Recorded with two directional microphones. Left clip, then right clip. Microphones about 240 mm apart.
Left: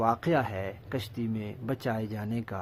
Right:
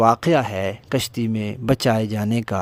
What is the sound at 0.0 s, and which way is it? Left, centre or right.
Speech, right.